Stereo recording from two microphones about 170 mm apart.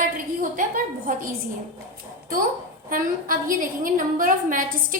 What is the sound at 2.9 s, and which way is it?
A woman's voice, 55° right (ahead or behind).